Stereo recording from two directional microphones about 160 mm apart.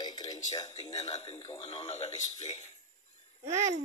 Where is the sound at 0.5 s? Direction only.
45° left (ahead or behind).